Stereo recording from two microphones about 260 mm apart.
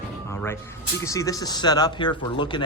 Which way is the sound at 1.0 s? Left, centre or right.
Centre.